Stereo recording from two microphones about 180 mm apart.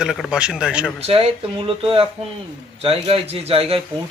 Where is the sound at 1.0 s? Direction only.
35° right (ahead or behind).